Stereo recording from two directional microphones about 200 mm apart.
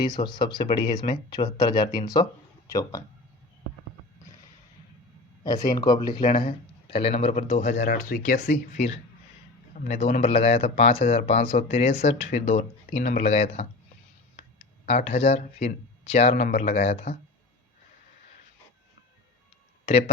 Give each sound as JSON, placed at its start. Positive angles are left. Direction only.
{"t": 0.0, "sound": "speech", "side_deg": 20}
{"t": 5.4, "sound": "speech", "side_deg": 20}
{"t": 14.8, "sound": "speech", "side_deg": 30}
{"t": 19.8, "sound": "a sound", "side_deg": 30}